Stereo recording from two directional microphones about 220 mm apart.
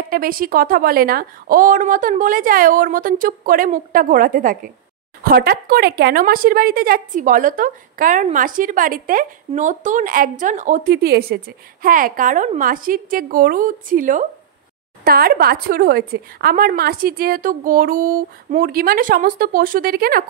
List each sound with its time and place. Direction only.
0.1 s speech: 40° right (ahead or behind)